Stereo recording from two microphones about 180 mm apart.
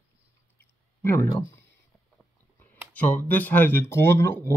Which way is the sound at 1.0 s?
15° left (ahead or behind).